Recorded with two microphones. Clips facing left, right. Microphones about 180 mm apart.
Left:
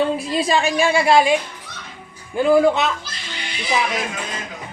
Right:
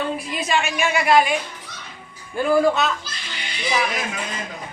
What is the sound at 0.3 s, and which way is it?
A woman's voice, 30° left (ahead or behind).